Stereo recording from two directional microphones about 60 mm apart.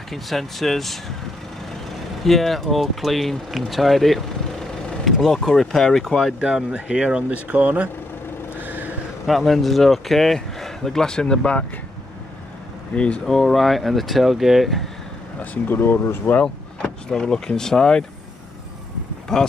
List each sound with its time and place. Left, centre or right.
0.1 s speech: centre
2.2 s speech: centre
6.4 s speech: centre
7.4 s speech: right
8.5 s a sound: right
9.2 s speech: centre
12.9 s speech: centre
13.4 s speech: centre
15.7 s speech: left
17.1 s speech: centre
19.3 s speech: centre